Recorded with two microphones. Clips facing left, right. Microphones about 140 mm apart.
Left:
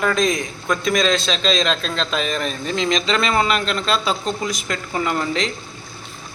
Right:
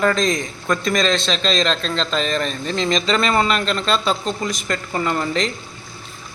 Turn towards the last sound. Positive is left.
turn(degrees=0)  # may be behind; listen again after turning